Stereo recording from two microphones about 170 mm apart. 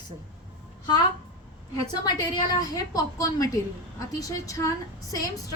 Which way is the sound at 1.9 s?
25° left (ahead or behind).